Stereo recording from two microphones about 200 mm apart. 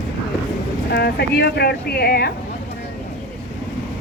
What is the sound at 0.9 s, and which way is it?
A woman's voice, 55° left (ahead or behind).